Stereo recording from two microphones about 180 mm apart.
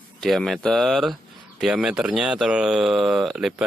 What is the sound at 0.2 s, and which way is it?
Speech, centre (ahead or behind).